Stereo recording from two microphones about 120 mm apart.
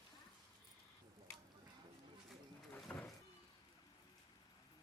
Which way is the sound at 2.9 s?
15° left (ahead or behind).